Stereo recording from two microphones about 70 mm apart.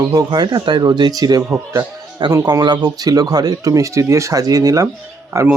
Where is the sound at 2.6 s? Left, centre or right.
Right.